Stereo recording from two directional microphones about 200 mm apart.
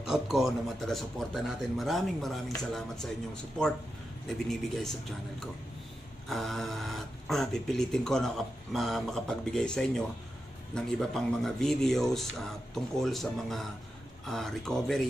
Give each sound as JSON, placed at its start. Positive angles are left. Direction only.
{"t": 0.1, "sound": "speech", "side_deg": 0}
{"t": 6.2, "sound": "speech", "side_deg": 0}